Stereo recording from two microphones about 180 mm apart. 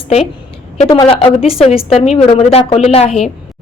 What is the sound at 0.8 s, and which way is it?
A woman's voice, 30° left (ahead or behind).